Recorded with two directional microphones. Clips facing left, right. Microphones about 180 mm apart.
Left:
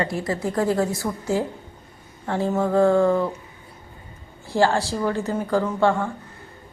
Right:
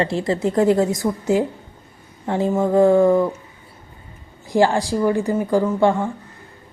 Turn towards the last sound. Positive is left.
turn(degrees=-15)  # may be behind; listen again after turning